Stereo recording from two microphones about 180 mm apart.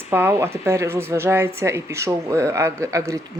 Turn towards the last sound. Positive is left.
turn(degrees=-15)  # may be behind; listen again after turning